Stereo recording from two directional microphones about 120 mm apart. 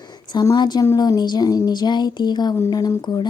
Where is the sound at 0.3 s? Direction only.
35° left (ahead or behind).